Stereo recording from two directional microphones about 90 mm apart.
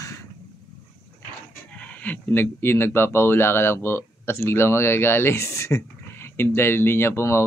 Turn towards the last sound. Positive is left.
turn(degrees=30)  # may be behind; listen again after turning